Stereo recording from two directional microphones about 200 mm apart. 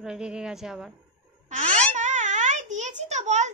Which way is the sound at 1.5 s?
40° right (ahead or behind).